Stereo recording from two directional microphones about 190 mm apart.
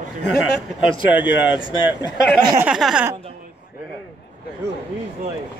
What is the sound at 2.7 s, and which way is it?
Speech, 5° right (ahead or behind).